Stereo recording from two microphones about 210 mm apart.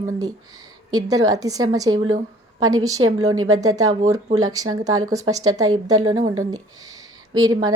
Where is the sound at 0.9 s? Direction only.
15° right (ahead or behind).